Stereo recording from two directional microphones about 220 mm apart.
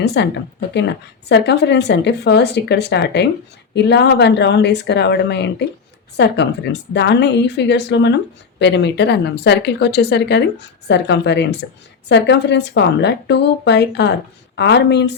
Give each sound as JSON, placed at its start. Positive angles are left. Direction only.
{"t": 0.0, "sound": "speech", "side_deg": 50}
{"t": 1.3, "sound": "a woman's voice", "side_deg": 50}